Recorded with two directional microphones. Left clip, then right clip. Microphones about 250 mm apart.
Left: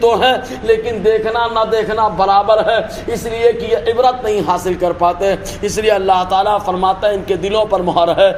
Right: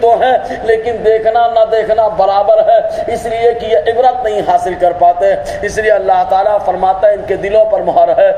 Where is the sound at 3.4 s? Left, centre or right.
Left.